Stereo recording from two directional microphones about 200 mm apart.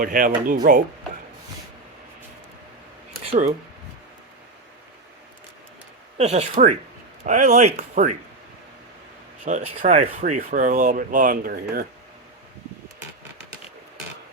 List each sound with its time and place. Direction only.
0.0 s speech: 45° right (ahead or behind)
3.1 s a sound: 40° right (ahead or behind)
6.1 s speech: 30° right (ahead or behind)
9.4 s speech: 40° right (ahead or behind)